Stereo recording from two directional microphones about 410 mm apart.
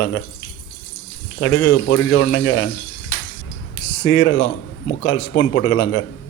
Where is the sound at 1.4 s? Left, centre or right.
Left.